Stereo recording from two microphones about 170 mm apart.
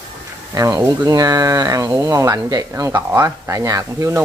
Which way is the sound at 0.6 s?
20° right (ahead or behind).